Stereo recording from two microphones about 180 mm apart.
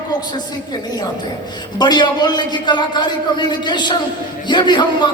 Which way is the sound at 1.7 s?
25° left (ahead or behind).